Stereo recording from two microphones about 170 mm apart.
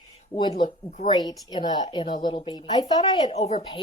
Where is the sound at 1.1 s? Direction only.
25° left (ahead or behind).